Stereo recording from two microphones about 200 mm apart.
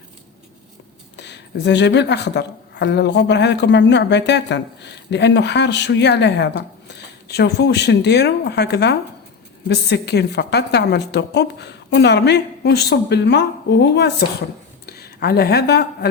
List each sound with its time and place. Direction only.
1.1 s speech: 60° left (ahead or behind)